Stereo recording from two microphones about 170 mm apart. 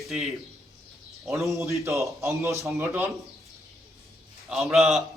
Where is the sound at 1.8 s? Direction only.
15° right (ahead or behind).